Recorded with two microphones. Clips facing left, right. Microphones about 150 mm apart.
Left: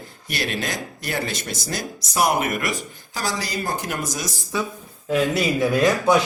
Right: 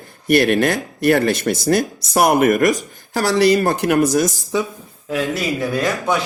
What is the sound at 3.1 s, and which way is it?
Speech, 65° right (ahead or behind).